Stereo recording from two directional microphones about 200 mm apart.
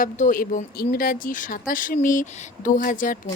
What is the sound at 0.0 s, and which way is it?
Speech, 40° left (ahead or behind).